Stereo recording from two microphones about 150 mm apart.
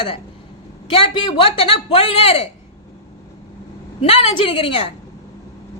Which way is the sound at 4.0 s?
40° left (ahead or behind).